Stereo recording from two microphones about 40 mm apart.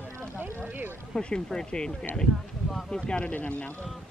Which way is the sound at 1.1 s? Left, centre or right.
Centre.